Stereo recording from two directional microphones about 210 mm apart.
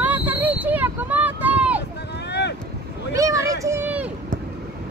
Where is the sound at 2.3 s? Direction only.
55° left (ahead or behind).